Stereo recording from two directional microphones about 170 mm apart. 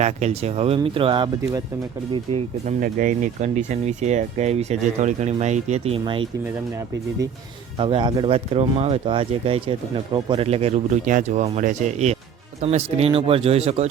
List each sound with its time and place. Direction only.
0.0 s speech: 40° right (ahead or behind)
2.8 s speech: 50° right (ahead or behind); by 6.2 s 35° right (ahead or behind)
7.8 s speech: 30° right (ahead or behind)